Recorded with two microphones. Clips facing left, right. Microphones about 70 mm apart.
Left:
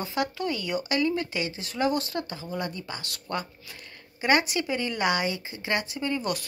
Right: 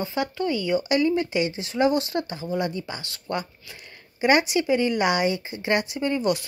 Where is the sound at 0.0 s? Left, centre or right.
Centre.